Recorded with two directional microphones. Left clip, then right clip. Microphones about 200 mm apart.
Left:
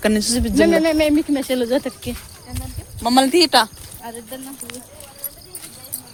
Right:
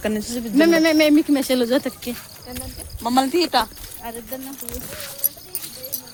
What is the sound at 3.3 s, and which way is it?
Speech, 60° left (ahead or behind).